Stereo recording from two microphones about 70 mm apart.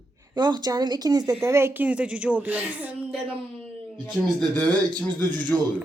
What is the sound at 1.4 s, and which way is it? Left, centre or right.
Speech, right.